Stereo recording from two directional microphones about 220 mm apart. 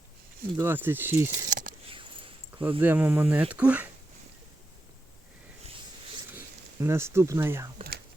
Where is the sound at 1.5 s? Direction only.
35° right (ahead or behind).